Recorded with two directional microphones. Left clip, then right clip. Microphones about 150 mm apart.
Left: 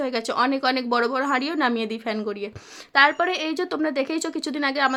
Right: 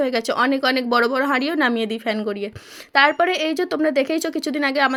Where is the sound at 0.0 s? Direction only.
25° right (ahead or behind).